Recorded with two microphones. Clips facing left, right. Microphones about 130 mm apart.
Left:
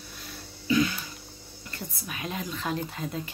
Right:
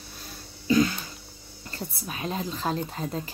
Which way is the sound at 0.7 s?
40° right (ahead or behind).